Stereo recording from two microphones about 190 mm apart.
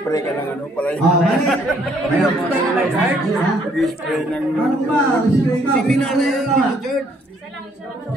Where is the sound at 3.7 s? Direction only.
Centre (ahead or behind).